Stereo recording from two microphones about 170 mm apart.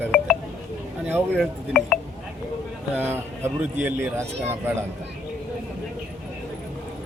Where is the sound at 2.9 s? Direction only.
10° right (ahead or behind).